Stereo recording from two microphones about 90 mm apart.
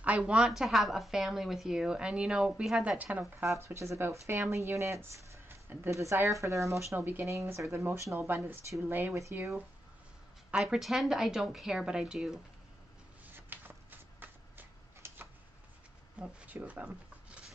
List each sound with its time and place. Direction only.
0.0 s speech: 15° right (ahead or behind)
3.4 s speech: 30° right (ahead or behind)
7.0 s speech: 20° right (ahead or behind)
7.2 s speech: 35° right (ahead or behind)
10.5 s a woman's voice: 5° right (ahead or behind)
13.3 s a sound: 20° right (ahead or behind)
16.2 s speech: 15° right (ahead or behind)